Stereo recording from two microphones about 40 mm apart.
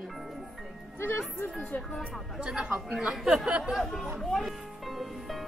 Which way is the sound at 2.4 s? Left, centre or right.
Right.